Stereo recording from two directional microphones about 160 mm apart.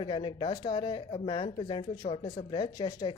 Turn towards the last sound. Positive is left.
turn(degrees=25)  # may be behind; listen again after turning